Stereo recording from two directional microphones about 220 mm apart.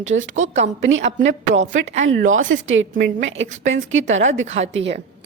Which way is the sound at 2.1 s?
60° right (ahead or behind).